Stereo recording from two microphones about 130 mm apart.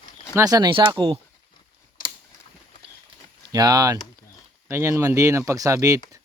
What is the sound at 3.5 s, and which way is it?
Speech, 30° right (ahead or behind).